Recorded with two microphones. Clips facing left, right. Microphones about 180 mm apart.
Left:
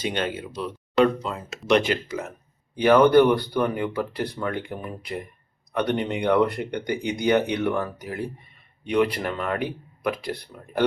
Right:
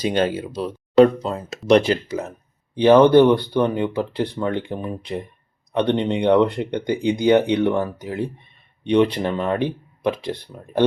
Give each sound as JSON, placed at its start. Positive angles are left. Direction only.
{"t": 0.0, "sound": "speech", "side_deg": -35}